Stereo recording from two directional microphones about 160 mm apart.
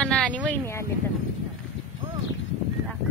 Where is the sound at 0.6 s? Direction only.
15° left (ahead or behind).